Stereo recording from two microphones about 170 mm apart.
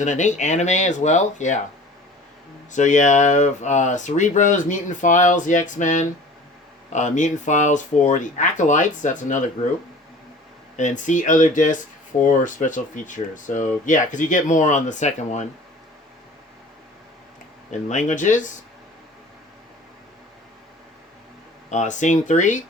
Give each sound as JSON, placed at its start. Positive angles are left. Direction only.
{"t": 0.0, "sound": "speech", "side_deg": 45}
{"t": 2.7, "sound": "speech", "side_deg": 45}
{"t": 10.8, "sound": "speech", "side_deg": 45}
{"t": 17.7, "sound": "speech", "side_deg": 45}
{"t": 21.7, "sound": "speech", "side_deg": 45}